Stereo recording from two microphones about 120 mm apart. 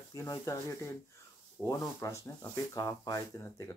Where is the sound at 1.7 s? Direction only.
25° left (ahead or behind).